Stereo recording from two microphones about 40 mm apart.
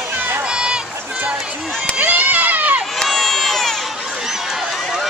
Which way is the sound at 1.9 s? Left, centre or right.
Right.